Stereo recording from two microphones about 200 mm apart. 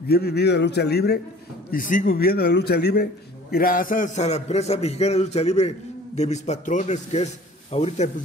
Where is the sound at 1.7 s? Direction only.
45° left (ahead or behind).